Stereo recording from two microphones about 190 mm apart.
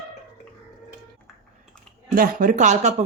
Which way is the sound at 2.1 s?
45° right (ahead or behind).